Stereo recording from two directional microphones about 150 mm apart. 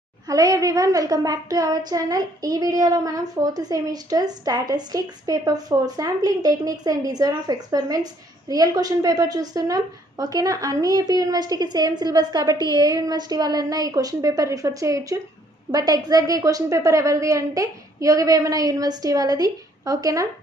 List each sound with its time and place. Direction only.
0.3 s child singing: 25° right (ahead or behind)